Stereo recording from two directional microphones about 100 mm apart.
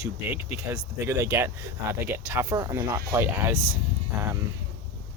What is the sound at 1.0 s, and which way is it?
Speech, 30° right (ahead or behind).